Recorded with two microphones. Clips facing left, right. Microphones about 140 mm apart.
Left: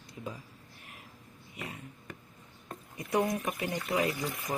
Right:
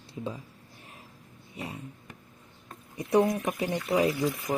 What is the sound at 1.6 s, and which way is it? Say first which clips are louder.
Speech: right 4 dB; 30° right (ahead or behind).